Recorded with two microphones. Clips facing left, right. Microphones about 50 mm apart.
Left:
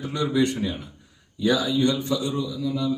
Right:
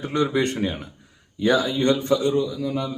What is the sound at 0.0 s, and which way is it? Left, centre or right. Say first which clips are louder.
A man's voice: right 1 dB; right.